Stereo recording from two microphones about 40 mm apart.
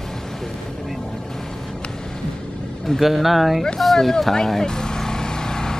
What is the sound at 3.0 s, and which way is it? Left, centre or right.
Speech, centre.